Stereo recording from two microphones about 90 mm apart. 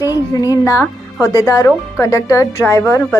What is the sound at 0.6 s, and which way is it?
A woman's voice, 35° left (ahead or behind).